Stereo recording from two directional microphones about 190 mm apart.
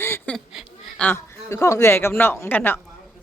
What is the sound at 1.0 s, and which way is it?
Speech, 15° left (ahead or behind).